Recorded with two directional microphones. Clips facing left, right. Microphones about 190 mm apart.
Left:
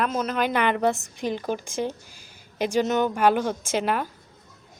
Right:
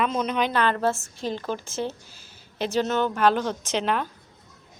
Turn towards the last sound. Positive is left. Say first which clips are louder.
# left 1 dB
turn(degrees=10)  # may be behind; listen again after turning